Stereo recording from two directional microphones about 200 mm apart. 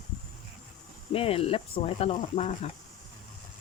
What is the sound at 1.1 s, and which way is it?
Speech, 30° left (ahead or behind).